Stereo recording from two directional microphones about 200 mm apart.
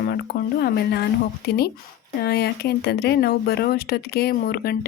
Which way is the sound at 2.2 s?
55° left (ahead or behind).